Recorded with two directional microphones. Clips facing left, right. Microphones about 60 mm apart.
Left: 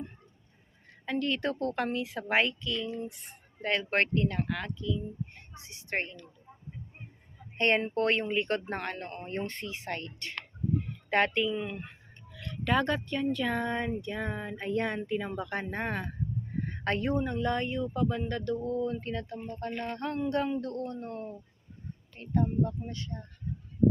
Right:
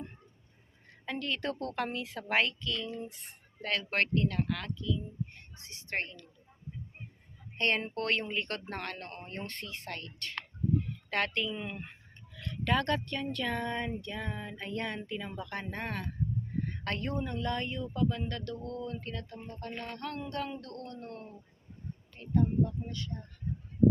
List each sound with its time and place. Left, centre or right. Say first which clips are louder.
1.0 s a woman's voice: left 4 dB; centre
3.6 s speech: left 3 dB; centre
7.9 s speech: left 5 dB; centre
9.9 s music: left 4 dB; left
11.1 s speech: left 6 dB; centre
11.5 s a woman's voice: left 5 dB; centre; by 15.3 s left
15.4 s music: left 5 dB; centre
15.7 s speech: left 4 dB; centre
18.3 s music: left 7 dB; centre
22.2 s speech: left 3 dB; left
22.9 s music: left 1 dB; left